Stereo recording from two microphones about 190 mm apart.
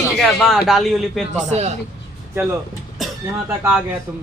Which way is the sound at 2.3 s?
10° right (ahead or behind).